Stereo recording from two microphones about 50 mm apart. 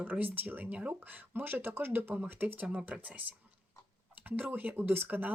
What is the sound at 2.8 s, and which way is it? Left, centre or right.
Speech, right.